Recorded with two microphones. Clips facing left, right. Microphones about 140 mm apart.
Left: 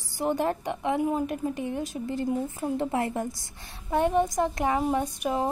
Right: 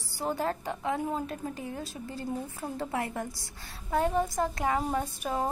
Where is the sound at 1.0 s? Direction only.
10° left (ahead or behind).